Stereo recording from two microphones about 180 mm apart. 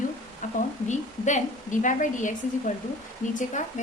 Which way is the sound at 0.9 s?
40° left (ahead or behind).